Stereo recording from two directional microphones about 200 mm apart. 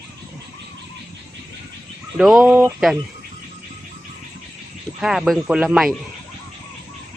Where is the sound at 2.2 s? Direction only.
Centre (ahead or behind).